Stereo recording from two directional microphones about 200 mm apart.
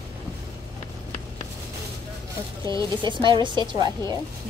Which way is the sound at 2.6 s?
20° right (ahead or behind).